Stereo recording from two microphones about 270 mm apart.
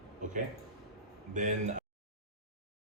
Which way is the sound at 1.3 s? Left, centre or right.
Right.